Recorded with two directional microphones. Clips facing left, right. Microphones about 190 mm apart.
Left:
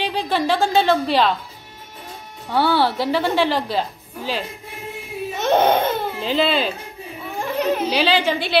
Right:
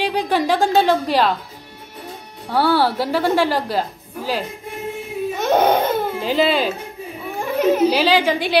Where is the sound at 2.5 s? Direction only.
10° right (ahead or behind).